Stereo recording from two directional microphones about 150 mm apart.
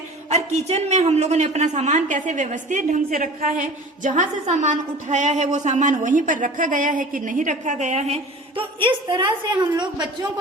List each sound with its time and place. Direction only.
0.3 s a man's voice: 45° right (ahead or behind); by 10.1 s 30° right (ahead or behind)